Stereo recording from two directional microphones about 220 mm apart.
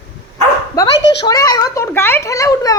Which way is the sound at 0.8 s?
15° left (ahead or behind).